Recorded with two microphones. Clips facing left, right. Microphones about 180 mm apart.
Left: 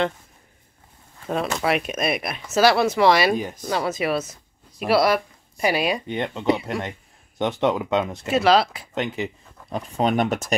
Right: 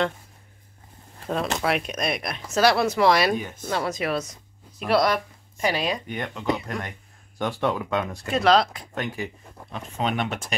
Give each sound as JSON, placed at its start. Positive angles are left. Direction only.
{"t": 1.3, "sound": "speech", "side_deg": 0}
{"t": 6.0, "sound": "speech", "side_deg": 25}
{"t": 8.3, "sound": "speech", "side_deg": 5}
{"t": 8.9, "sound": "speech", "side_deg": 20}
{"t": 9.7, "sound": "speech", "side_deg": 40}